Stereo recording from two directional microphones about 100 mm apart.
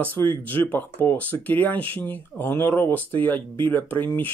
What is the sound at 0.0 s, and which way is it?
Speech, 20° left (ahead or behind).